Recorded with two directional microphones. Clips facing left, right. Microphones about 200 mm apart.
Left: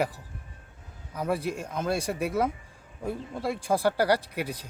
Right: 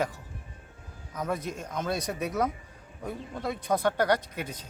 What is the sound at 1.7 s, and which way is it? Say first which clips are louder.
Speech: left 1 dB; 10° left (ahead or behind).